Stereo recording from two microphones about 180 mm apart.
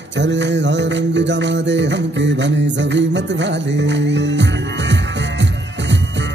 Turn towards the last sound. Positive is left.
turn(degrees=-80)